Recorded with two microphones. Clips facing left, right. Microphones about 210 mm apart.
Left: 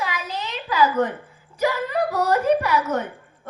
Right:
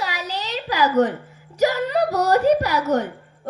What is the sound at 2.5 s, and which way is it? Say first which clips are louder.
Speech: right 1 dB; 40° right (ahead or behind).